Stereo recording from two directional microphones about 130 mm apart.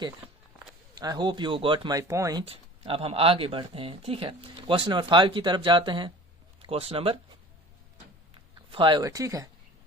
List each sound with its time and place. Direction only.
0.9 s speech: 30° right (ahead or behind)
2.5 s speech: 45° right (ahead or behind)
8.7 s speech: 40° right (ahead or behind)
9.0 s speech: 25° right (ahead or behind)